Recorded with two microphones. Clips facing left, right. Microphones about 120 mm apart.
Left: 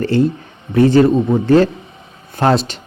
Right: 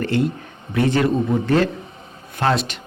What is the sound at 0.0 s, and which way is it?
Speech, 35° left (ahead or behind).